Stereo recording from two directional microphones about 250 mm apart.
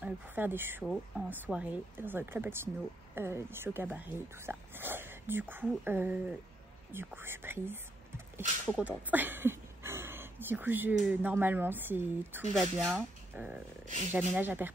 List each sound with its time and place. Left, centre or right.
0.0 s speech: centre
8.6 s speech: centre
9.1 s speech: centre
13.8 s speech: right
14.1 s speech: centre